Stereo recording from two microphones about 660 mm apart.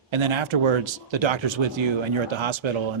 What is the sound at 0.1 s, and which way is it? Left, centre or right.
Speech, right.